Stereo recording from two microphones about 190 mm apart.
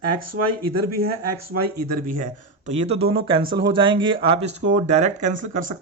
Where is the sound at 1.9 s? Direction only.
45° right (ahead or behind).